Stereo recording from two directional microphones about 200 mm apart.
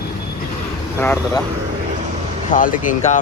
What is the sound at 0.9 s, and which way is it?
Speech, 10° left (ahead or behind).